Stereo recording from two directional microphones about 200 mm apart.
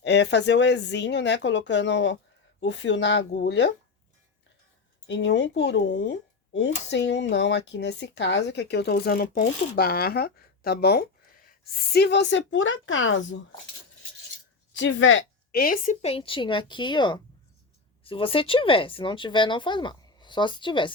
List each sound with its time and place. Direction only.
0.0 s speech: 55° left (ahead or behind)
5.0 s a woman's voice: 65° left (ahead or behind)
14.8 s a woman's voice: 70° left (ahead or behind)
15.5 s speech: 45° left (ahead or behind); by 20.9 s 25° left (ahead or behind)